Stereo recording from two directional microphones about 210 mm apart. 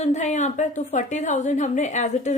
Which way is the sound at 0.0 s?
35° left (ahead or behind).